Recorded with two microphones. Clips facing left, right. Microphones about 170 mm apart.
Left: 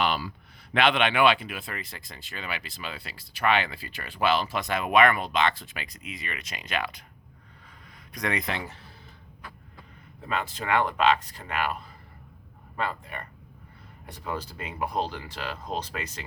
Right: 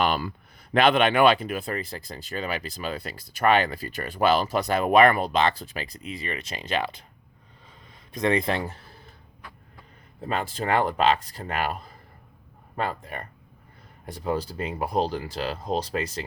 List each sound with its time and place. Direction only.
0.0 s speech: 50° right (ahead or behind); by 7.0 s 30° right (ahead or behind)
8.1 s speech: 30° right (ahead or behind)
10.2 s speech: 35° right (ahead or behind)